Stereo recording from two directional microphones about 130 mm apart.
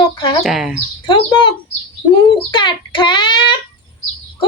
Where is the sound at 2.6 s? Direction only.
35° left (ahead or behind).